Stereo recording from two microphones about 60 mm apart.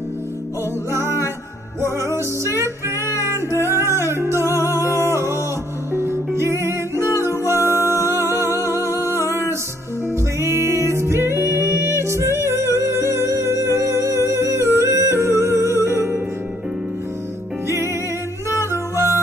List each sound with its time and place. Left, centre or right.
0.9 s music: right
10.4 s music: right
18.5 s music: right